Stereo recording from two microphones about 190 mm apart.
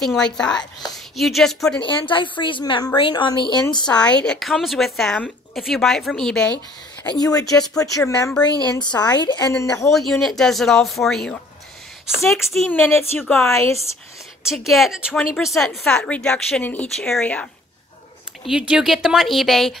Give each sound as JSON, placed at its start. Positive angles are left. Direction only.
{"t": 0.0, "sound": "a woman's voice", "side_deg": 5}
{"t": 1.8, "sound": "a woman's voice", "side_deg": 25}
{"t": 3.9, "sound": "a woman's voice", "side_deg": 5}
{"t": 7.1, "sound": "a woman's voice", "side_deg": 20}
{"t": 9.9, "sound": "a woman's voice", "side_deg": 0}
{"t": 13.5, "sound": "speech", "side_deg": 15}
{"t": 14.4, "sound": "a woman's voice", "side_deg": 0}
{"t": 18.5, "sound": "a woman's voice", "side_deg": -5}